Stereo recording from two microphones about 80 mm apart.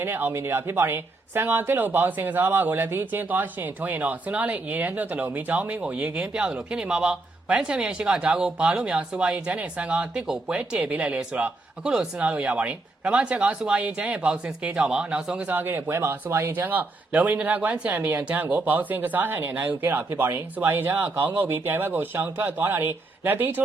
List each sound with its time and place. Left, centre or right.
0.0 s a man's voice: right
15.5 s speech: right